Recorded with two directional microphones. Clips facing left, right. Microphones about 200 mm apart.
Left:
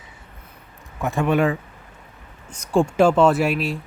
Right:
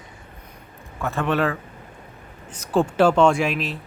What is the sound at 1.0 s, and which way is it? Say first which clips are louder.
Speech: left 3 dB; 15° left (ahead or behind).